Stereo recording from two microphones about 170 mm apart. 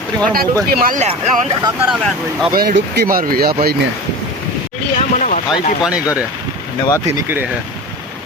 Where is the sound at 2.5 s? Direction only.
65° right (ahead or behind).